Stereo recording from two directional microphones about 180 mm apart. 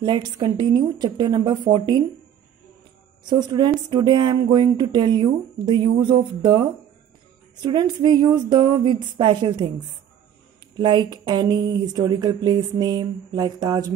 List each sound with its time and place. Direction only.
0.0 s speech: 25° right (ahead or behind)
3.3 s speech: 25° right (ahead or behind)
7.6 s speech: 25° right (ahead or behind)
10.8 s speech: 25° right (ahead or behind)